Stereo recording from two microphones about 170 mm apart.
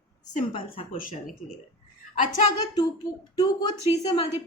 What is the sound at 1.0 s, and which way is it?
Speech, 55° left (ahead or behind).